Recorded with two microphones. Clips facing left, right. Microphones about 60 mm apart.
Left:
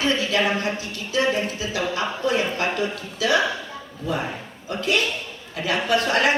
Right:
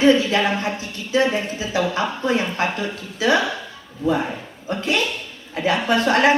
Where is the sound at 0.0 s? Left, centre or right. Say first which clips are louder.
Right 6 dB; right.